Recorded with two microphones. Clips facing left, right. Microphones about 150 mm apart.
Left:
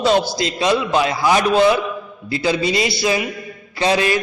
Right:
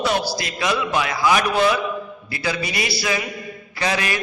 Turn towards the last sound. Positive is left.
turn(degrees=25)  # may be behind; listen again after turning